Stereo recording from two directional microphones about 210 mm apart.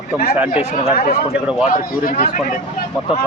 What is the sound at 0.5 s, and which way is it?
Speech, 30° left (ahead or behind).